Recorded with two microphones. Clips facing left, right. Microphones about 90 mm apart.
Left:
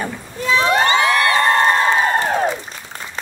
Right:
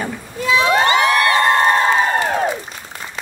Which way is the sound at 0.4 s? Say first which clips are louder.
Right 1 dB; 35° left (ahead or behind).